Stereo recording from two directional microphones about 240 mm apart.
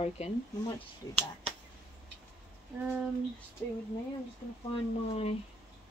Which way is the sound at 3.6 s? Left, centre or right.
Centre.